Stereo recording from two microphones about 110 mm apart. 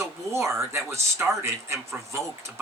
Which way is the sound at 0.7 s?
25° right (ahead or behind).